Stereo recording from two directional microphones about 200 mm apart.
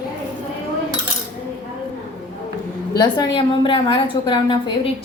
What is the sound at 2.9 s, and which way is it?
A woman's voice, 20° left (ahead or behind).